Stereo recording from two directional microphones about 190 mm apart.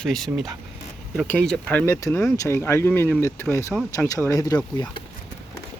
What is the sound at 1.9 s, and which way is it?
Speech, 15° left (ahead or behind).